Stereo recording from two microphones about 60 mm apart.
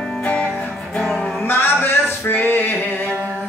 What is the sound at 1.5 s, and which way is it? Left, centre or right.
Music, left.